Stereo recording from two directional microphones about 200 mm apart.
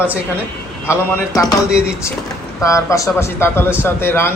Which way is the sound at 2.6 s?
15° left (ahead or behind).